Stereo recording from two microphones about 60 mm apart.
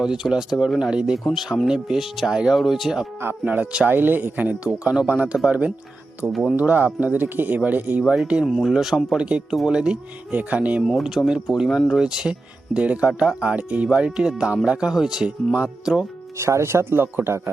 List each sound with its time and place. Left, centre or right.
0.0 s speech: centre
1.2 s speech: centre
3.4 s a man's voice: right
6.3 s speech: centre
6.6 s a man's voice: right
8.4 s speech: centre
9.1 s a man's voice: centre
11.2 s speech: left
11.5 s speech: centre
16.4 s speech: right
17.0 s a man's voice: right